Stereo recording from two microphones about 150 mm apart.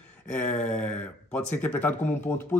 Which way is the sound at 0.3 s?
10° left (ahead or behind).